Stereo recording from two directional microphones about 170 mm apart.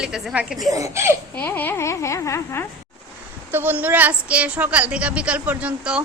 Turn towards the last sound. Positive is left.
turn(degrees=-5)  # may be behind; listen again after turning